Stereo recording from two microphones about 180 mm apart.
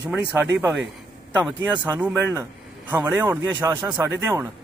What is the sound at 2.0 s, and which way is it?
Speech, 10° right (ahead or behind).